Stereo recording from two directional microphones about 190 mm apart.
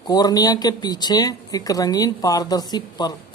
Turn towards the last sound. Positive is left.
turn(degrees=20)  # may be behind; listen again after turning